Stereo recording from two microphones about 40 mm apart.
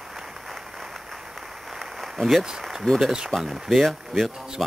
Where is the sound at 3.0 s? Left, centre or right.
Centre.